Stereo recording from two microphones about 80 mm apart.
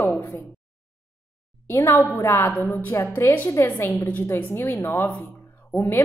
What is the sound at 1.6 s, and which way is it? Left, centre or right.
A woman's voice, left.